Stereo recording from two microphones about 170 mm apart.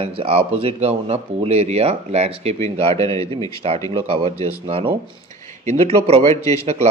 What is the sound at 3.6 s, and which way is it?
Speech, 35° right (ahead or behind).